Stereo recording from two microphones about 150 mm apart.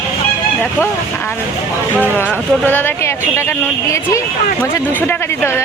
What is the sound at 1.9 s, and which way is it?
Speech, 10° right (ahead or behind).